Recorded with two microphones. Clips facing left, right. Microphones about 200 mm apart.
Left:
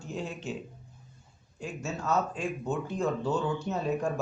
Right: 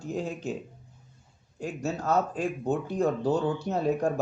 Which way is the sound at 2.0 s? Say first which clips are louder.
Right 2 dB; 60° right (ahead or behind).